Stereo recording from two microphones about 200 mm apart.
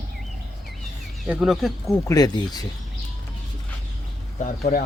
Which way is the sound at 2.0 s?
20° left (ahead or behind).